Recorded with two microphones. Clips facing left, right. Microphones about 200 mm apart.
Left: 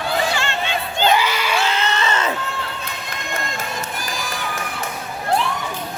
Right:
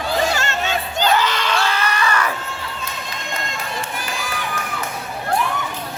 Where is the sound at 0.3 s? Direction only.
45° right (ahead or behind).